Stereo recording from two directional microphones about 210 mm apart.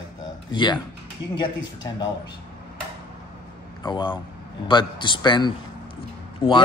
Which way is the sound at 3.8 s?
20° left (ahead or behind).